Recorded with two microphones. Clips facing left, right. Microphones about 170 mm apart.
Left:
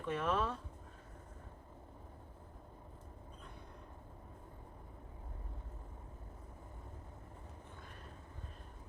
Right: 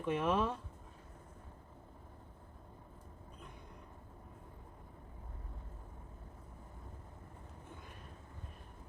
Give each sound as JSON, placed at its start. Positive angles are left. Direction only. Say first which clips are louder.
{"t": 0.0, "sound": "speech", "louder": "right 3 dB", "side_deg": -15}